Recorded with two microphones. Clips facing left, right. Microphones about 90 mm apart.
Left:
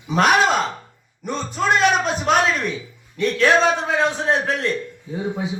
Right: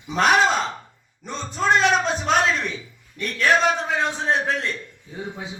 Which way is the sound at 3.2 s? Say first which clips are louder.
Left 3 dB; 20° left (ahead or behind).